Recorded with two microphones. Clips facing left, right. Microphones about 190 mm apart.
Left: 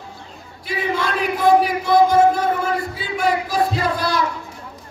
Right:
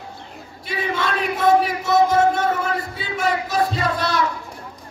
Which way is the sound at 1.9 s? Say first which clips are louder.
Left 3 dB; 25° right (ahead or behind).